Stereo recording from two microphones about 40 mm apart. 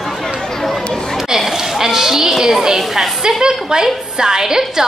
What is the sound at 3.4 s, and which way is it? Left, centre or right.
A woman's voice, centre.